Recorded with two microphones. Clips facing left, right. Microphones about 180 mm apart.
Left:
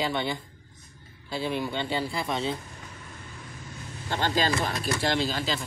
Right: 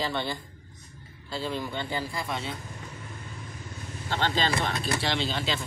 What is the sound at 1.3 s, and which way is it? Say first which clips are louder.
Speech: left 3 dB; 15° left (ahead or behind).